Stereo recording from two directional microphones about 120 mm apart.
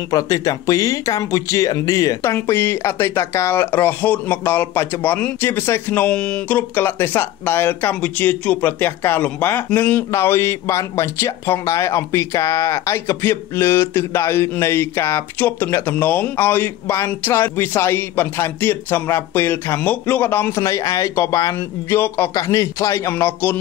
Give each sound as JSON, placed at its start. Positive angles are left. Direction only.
{"t": 0.1, "sound": "speech", "side_deg": 30}
{"t": 6.7, "sound": "speech", "side_deg": 20}
{"t": 10.1, "sound": "speech", "side_deg": 20}